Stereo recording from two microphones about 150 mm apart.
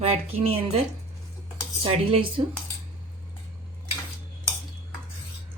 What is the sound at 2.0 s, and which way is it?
Speech, 35° right (ahead or behind).